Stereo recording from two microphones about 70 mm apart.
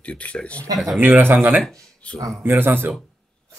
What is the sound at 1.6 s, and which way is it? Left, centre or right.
Speech, centre.